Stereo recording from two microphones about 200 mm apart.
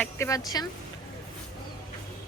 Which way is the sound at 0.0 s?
15° left (ahead or behind).